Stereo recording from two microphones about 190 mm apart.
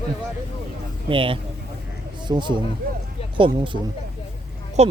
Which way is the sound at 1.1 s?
25° right (ahead or behind).